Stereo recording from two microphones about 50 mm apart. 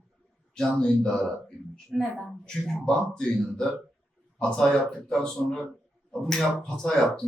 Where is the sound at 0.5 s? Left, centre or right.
Centre.